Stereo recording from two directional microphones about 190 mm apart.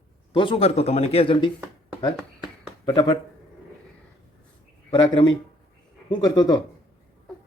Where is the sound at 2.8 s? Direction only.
20° left (ahead or behind).